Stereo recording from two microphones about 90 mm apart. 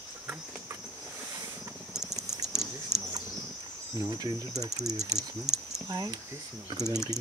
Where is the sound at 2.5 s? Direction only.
5° right (ahead or behind).